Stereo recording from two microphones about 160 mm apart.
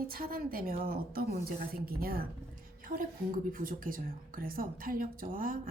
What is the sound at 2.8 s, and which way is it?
A woman's voice, 60° right (ahead or behind).